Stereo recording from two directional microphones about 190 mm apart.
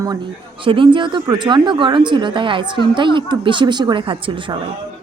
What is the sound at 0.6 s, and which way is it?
Speech, 25° right (ahead or behind).